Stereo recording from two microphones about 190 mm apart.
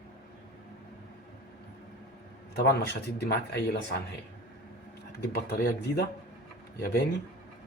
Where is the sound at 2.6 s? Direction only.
60° left (ahead or behind).